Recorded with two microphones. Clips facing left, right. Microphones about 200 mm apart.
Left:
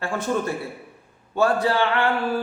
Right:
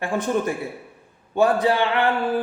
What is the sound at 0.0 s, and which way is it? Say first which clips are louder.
Mantra: right 2 dB; 15° right (ahead or behind).